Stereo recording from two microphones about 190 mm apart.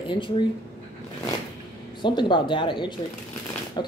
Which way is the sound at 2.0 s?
25° left (ahead or behind).